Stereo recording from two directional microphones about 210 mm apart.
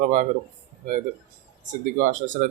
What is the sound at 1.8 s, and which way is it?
Speech, 35° right (ahead or behind).